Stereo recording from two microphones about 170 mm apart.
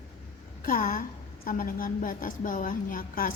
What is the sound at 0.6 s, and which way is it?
A woman's voice, 55° left (ahead or behind).